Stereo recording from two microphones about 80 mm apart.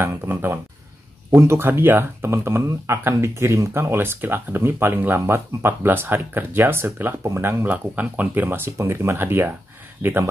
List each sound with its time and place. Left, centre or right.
0.0 s speech: right
7.6 s speech: centre